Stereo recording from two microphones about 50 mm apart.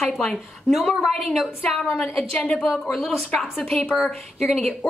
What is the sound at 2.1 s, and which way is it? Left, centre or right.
Speech, left.